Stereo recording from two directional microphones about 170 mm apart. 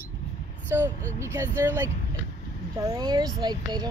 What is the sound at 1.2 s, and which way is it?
Speech, 15° right (ahead or behind).